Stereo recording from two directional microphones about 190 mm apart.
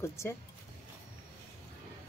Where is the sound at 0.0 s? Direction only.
15° left (ahead or behind).